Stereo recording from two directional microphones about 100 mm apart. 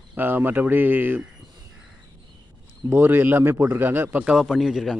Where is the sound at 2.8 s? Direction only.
20° right (ahead or behind).